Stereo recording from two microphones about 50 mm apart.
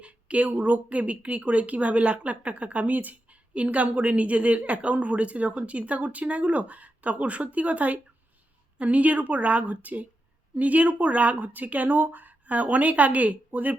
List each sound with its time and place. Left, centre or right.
0.0 s speech: right